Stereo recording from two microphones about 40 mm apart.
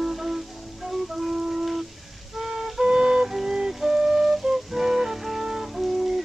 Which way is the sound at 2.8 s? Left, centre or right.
Centre.